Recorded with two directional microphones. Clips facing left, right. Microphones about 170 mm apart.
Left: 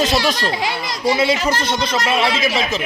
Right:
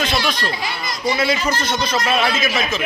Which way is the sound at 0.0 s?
40° left (ahead or behind).